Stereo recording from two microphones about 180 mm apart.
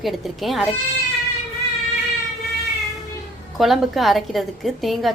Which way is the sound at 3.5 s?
Centre (ahead or behind).